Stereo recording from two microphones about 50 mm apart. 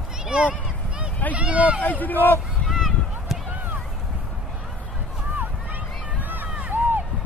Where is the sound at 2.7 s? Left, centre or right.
Centre.